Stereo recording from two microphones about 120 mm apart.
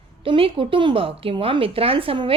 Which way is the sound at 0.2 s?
50° right (ahead or behind).